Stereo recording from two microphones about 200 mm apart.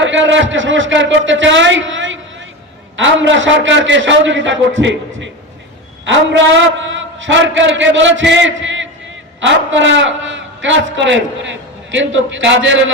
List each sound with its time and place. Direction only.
0.0 s a man's voice: 65° right (ahead or behind)